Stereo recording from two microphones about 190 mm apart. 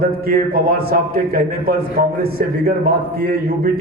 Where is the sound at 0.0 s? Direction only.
50° right (ahead or behind).